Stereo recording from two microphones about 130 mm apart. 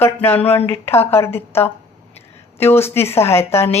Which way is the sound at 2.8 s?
20° left (ahead or behind).